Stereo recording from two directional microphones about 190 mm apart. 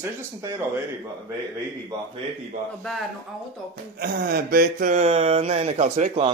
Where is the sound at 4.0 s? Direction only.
50° right (ahead or behind); by 6.3 s 35° right (ahead or behind).